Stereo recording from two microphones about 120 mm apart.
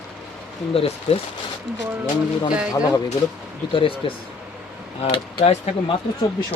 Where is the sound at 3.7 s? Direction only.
45° left (ahead or behind).